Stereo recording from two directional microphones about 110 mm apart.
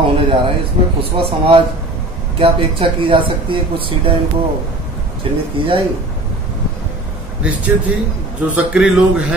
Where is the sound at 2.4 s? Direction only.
55° right (ahead or behind).